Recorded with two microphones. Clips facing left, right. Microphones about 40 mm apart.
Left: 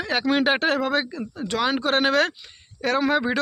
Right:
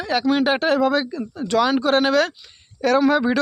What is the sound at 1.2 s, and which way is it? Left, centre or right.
Speech, left.